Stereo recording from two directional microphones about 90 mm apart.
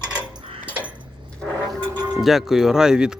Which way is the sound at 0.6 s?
15° right (ahead or behind).